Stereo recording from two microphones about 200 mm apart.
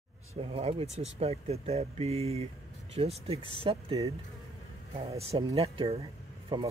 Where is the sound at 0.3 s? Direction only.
30° right (ahead or behind).